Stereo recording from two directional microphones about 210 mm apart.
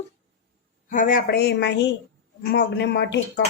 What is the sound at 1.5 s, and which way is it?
Speech, 55° left (ahead or behind).